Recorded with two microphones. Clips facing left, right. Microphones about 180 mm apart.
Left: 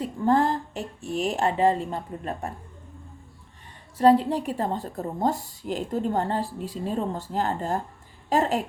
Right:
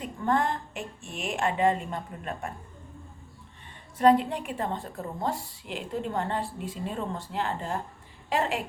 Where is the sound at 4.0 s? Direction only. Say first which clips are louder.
Left 3 dB; 35° left (ahead or behind).